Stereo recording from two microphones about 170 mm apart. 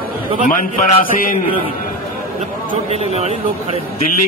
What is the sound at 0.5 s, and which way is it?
Speech, 55° left (ahead or behind).